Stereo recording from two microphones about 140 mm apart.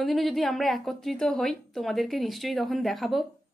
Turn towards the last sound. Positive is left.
turn(degrees=0)  # may be behind; listen again after turning